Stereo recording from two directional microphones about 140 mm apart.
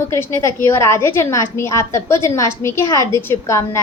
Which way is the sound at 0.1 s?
20° left (ahead or behind).